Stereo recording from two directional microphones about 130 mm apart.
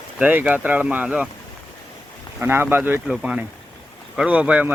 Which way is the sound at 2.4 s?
15° right (ahead or behind).